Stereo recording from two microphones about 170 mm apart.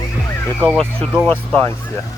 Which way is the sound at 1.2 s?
10° left (ahead or behind).